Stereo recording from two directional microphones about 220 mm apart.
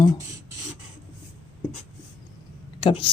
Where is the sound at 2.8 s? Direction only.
25° left (ahead or behind).